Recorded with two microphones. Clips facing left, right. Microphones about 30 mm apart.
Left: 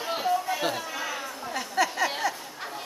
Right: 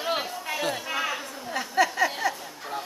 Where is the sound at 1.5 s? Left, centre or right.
Centre.